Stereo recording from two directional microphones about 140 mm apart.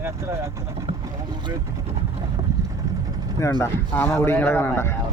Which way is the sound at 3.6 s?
15° left (ahead or behind).